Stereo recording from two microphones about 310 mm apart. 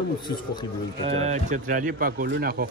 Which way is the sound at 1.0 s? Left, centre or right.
Centre.